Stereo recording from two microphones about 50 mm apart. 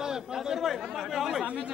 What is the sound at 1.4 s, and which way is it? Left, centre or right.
Speech, right.